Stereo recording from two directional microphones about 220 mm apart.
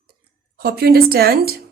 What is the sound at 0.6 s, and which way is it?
Speech, 45° right (ahead or behind).